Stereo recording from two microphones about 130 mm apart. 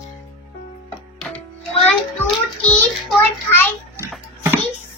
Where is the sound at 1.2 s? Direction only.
10° left (ahead or behind).